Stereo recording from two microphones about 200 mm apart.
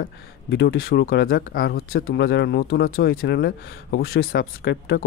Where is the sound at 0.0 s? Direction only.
55° left (ahead or behind).